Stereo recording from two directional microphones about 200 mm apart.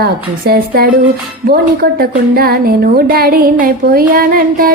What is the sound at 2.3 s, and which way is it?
A woman's voice, 50° right (ahead or behind).